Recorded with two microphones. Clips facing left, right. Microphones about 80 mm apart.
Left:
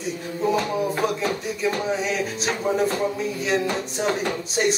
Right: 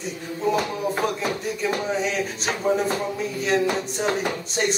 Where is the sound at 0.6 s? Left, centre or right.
Centre.